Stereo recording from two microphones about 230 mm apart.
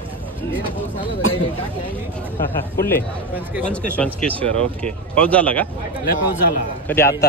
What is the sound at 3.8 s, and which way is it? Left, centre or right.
Speech, centre.